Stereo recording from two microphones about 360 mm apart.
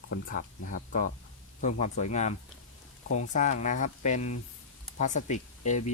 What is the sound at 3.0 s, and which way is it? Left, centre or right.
Speech, left.